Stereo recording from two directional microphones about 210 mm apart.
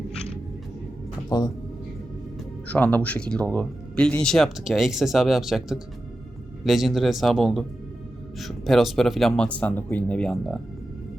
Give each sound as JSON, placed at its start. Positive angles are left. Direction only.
{"t": 1.3, "sound": "speech", "side_deg": 20}
{"t": 2.6, "sound": "speech", "side_deg": 5}